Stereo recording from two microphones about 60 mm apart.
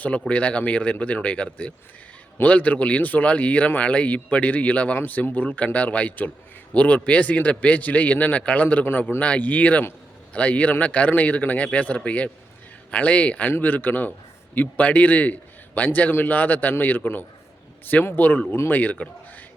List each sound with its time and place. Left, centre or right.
0.0 s a man's voice: left